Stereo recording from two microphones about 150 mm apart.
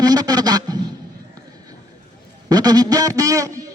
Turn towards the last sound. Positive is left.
turn(degrees=-20)  # may be behind; listen again after turning